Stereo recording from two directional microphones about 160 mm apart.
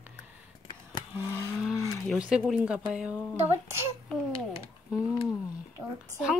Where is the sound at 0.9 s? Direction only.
20° left (ahead or behind).